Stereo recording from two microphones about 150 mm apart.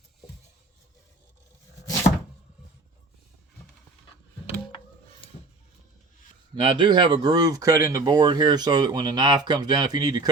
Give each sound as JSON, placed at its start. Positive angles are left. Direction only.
{"t": 5.2, "sound": "music", "side_deg": 35}
{"t": 6.6, "sound": "speech", "side_deg": -35}